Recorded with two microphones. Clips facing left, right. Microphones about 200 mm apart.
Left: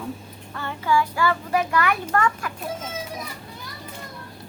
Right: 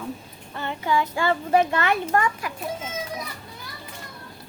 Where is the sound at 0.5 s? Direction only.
20° right (ahead or behind).